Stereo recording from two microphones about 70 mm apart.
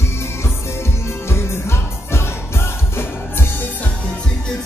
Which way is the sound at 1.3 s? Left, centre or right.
Left.